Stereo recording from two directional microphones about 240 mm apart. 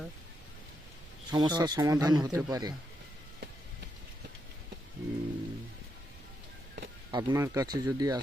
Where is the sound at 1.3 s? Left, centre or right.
Centre.